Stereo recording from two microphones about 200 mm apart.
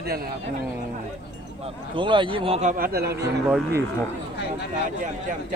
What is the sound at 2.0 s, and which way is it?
A man's voice, 25° right (ahead or behind).